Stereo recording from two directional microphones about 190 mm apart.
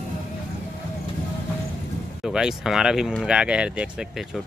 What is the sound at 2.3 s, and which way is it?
Speech, 5° right (ahead or behind).